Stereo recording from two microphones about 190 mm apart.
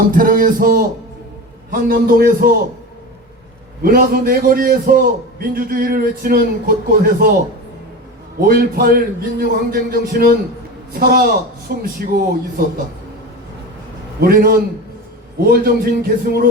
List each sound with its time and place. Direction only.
0.1 s a man's voice: 45° right (ahead or behind)
3.8 s a man's voice: 50° right (ahead or behind)
8.4 s a man's voice: 50° right (ahead or behind)
14.2 s a man's voice: 50° right (ahead or behind)